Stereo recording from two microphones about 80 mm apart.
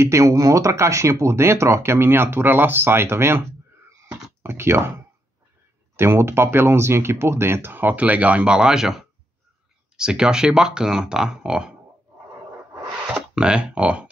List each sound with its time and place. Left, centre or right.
0.0 s speech: right; by 11.7 s centre
13.1 s speech: centre